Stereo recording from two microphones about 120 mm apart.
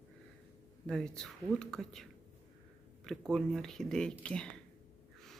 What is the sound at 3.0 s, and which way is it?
Speech, 5° left (ahead or behind).